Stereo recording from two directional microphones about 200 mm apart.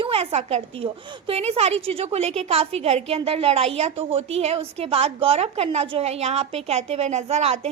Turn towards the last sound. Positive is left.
turn(degrees=-30)  # may be behind; listen again after turning